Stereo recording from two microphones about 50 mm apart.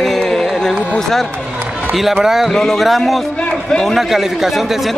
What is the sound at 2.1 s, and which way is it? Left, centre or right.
Speech, centre.